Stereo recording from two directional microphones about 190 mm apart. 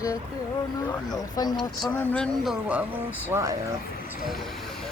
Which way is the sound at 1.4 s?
20° left (ahead or behind).